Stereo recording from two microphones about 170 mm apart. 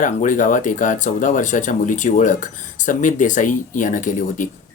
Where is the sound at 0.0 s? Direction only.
50° left (ahead or behind).